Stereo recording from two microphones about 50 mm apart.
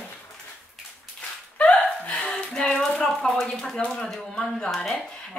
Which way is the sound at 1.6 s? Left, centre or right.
Left.